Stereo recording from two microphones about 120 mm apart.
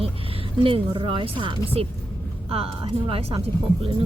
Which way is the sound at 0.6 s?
45° right (ahead or behind).